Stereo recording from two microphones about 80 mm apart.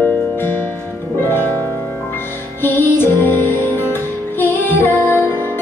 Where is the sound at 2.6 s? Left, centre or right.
Left.